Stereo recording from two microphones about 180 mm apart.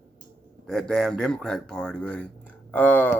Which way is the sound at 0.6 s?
5° left (ahead or behind).